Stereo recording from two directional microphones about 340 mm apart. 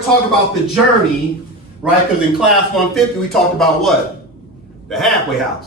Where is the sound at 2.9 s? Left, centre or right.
Centre.